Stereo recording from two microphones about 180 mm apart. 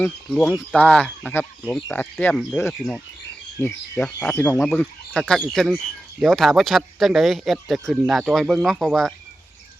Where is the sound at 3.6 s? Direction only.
15° left (ahead or behind).